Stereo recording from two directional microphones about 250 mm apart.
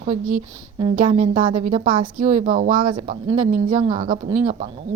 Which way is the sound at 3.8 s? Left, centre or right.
Centre.